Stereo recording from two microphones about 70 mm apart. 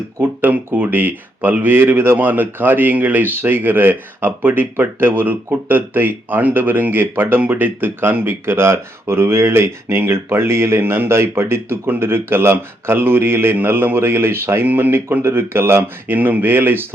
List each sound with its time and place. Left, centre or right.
0.2 s speech: right